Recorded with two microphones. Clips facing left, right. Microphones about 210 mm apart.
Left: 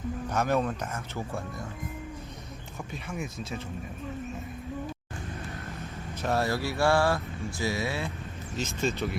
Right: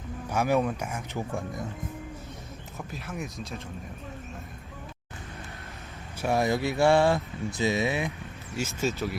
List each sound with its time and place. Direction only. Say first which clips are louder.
0.3 s speech: right 2 dB; 10° right (ahead or behind)
2.9 s speech: left 1 dB; centre (ahead or behind)
6.2 s speech: right 3 dB; 15° right (ahead or behind)
8.5 s speech: right 1 dB; 5° right (ahead or behind)